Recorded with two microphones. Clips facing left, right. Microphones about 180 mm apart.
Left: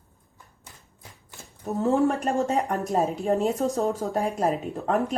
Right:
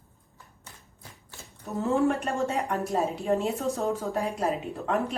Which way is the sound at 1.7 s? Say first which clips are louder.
Left 2 dB; 35° left (ahead or behind).